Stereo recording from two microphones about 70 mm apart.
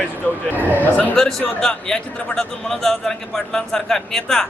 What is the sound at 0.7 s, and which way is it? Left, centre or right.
Speech, left.